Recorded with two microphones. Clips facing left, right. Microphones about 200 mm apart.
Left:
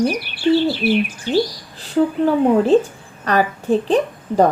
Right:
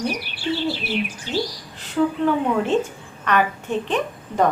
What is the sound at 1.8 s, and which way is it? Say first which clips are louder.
A woman's voice: left 3 dB; 35° left (ahead or behind).